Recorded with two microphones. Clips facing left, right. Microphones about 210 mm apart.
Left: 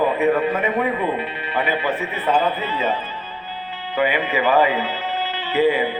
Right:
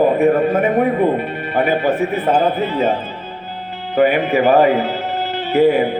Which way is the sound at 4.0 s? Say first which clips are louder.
Right 7 dB; 50° right (ahead or behind).